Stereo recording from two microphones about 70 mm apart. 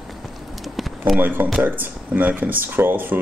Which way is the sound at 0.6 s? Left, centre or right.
Centre.